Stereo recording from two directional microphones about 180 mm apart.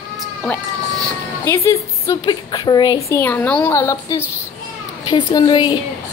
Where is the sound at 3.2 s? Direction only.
10° left (ahead or behind).